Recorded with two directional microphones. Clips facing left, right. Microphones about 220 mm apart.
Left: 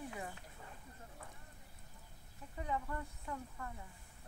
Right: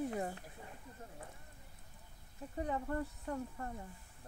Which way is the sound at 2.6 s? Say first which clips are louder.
Right 4 dB; 35° right (ahead or behind).